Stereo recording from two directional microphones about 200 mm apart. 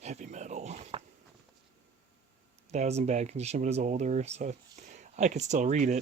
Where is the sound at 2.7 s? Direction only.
35° right (ahead or behind).